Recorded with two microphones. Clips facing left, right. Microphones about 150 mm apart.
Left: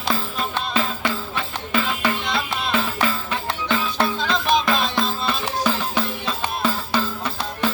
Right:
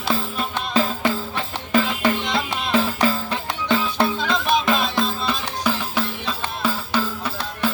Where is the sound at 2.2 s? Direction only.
20° right (ahead or behind).